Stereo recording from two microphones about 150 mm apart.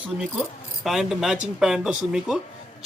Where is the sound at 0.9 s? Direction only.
Centre (ahead or behind).